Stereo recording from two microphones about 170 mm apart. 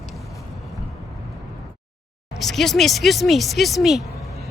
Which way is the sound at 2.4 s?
Centre (ahead or behind).